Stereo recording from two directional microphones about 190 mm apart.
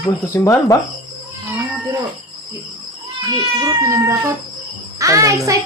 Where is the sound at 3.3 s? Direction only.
20° right (ahead or behind).